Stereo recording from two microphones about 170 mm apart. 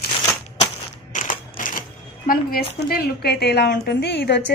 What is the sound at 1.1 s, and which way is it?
Crushing, 50° left (ahead or behind).